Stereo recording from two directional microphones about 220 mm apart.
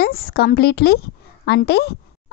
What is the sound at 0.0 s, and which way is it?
A woman's voice, 45° left (ahead or behind).